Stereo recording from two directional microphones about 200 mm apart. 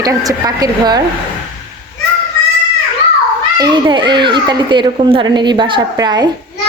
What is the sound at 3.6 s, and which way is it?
A child's voice, 20° right (ahead or behind).